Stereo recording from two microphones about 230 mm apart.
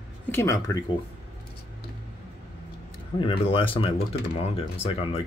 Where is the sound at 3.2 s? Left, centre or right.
Left.